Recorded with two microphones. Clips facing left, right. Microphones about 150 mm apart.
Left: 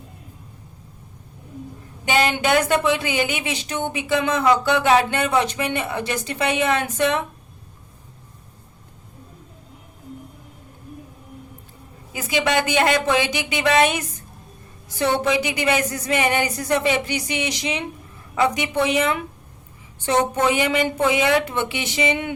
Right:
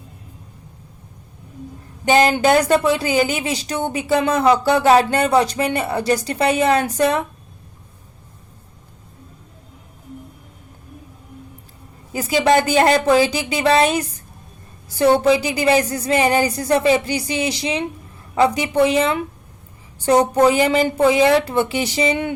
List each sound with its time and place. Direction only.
2.0 s a woman's voice: 40° right (ahead or behind)
12.1 s a woman's voice: 40° right (ahead or behind)